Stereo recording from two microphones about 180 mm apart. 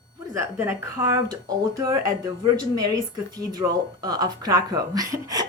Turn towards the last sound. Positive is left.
turn(degrees=-20)  # may be behind; listen again after turning